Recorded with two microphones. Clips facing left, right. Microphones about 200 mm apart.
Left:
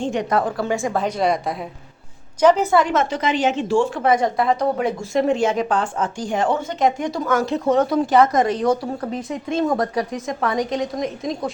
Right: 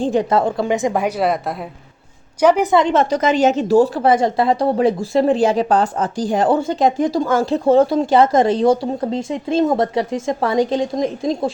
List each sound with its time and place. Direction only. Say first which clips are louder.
0.0 s a woman's voice: right 4 dB; 30° right (ahead or behind)